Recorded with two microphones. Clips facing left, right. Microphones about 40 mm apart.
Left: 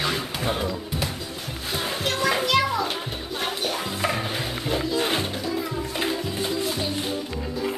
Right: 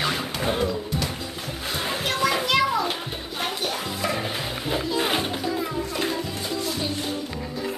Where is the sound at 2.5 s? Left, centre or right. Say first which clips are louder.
Right 1 dB; centre.